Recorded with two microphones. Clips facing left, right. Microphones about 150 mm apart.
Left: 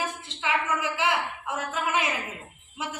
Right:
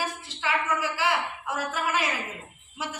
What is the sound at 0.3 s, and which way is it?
A woman's voice, 20° left (ahead or behind).